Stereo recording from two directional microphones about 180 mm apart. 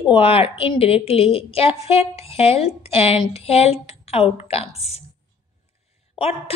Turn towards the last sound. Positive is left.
turn(degrees=35)  # may be behind; listen again after turning